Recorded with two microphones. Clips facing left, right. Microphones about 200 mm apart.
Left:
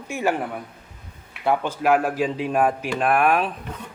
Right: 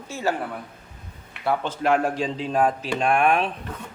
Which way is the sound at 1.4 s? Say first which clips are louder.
Left 2 dB; 10° left (ahead or behind).